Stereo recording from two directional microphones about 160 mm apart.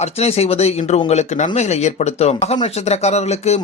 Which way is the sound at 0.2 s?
40° left (ahead or behind).